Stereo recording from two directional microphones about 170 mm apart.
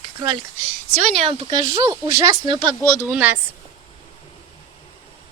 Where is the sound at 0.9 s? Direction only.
35° right (ahead or behind); by 2.4 s 15° right (ahead or behind).